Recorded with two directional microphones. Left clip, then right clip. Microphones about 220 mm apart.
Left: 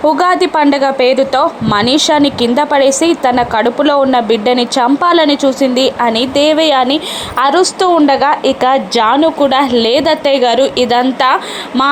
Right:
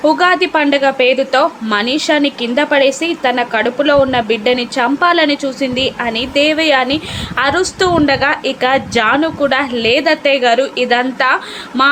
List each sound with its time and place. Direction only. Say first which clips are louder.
0.0 s a woman's voice: left 1 dB; 15° left (ahead or behind)
11.7 s a woman's voice: even; 10° left (ahead or behind)